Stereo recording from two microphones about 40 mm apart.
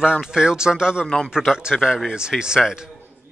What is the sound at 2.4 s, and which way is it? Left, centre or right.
Speech, centre.